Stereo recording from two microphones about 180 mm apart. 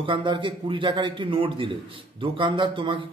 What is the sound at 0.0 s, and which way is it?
A man's voice, 25° right (ahead or behind).